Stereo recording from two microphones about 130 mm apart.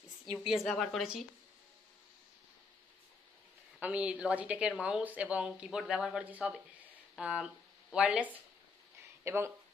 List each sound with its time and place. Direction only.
0.2 s a woman's voice: centre (ahead or behind)
3.8 s speech: 10° right (ahead or behind)
9.2 s speech: 20° right (ahead or behind)